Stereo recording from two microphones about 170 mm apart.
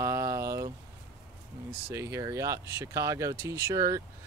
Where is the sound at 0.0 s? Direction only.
15° right (ahead or behind).